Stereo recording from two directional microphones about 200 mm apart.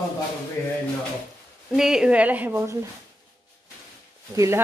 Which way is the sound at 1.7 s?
5° right (ahead or behind).